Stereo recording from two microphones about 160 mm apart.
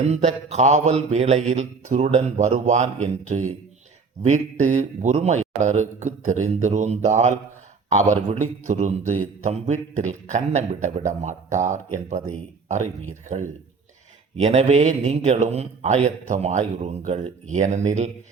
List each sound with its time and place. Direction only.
0.1 s a man's voice: 45° right (ahead or behind)